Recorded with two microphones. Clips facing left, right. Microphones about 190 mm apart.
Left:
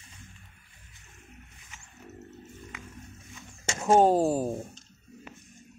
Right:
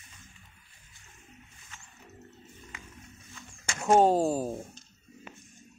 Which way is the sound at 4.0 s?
Centre (ahead or behind).